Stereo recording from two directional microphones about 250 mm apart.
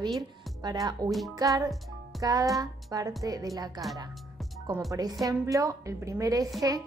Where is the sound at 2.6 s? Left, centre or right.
Centre.